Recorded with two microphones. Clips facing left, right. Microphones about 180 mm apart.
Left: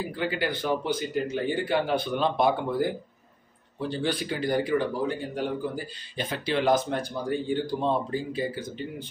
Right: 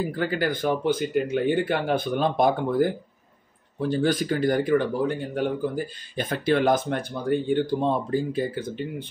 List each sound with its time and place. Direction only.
0.1 s speech: 45° right (ahead or behind)
3.9 s speech: 45° right (ahead or behind)